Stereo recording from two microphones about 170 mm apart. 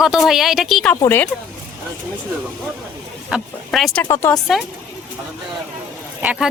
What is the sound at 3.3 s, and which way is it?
Speech, 5° right (ahead or behind).